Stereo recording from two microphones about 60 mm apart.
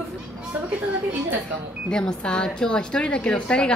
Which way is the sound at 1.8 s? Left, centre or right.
Centre.